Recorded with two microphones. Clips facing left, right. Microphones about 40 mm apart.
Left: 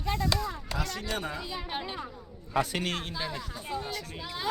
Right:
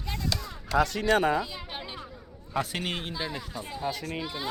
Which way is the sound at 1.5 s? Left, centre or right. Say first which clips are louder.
Left 3 dB; centre.